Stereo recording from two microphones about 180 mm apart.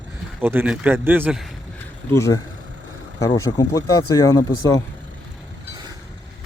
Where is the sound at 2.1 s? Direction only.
15° left (ahead or behind).